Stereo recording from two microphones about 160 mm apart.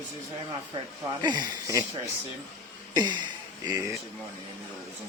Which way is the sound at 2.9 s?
25° right (ahead or behind).